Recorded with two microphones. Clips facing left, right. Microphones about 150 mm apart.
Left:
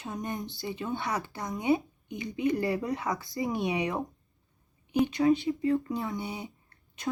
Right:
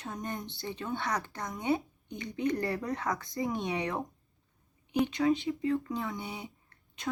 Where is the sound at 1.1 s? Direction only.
5° left (ahead or behind).